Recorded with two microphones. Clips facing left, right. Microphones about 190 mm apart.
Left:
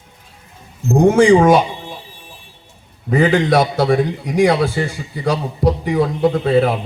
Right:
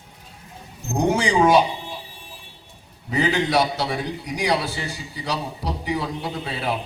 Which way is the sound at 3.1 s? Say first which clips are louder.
Left 7 dB; 55° left (ahead or behind).